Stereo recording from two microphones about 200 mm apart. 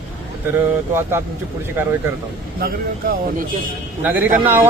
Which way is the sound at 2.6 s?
45° right (ahead or behind).